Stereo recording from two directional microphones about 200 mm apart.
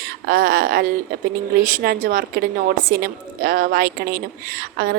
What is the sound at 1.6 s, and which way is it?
A woman's voice, 45° right (ahead or behind).